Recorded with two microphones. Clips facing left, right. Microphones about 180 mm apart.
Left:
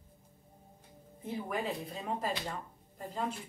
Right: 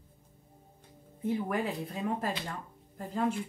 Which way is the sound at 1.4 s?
55° right (ahead or behind).